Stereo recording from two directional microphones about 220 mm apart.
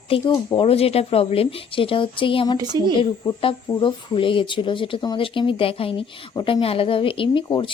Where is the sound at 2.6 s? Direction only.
20° right (ahead or behind).